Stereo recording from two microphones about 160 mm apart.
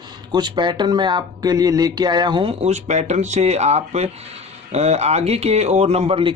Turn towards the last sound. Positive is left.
turn(degrees=-35)  # may be behind; listen again after turning